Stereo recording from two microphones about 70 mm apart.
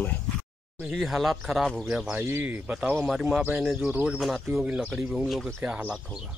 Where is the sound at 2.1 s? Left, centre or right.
Right.